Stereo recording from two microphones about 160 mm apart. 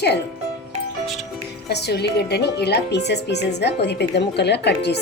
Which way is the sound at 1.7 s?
90° left.